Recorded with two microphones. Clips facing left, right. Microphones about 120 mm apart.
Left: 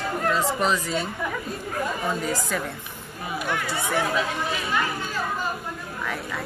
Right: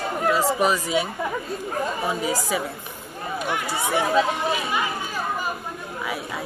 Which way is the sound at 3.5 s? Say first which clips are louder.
Right 2 dB; 20° right (ahead or behind).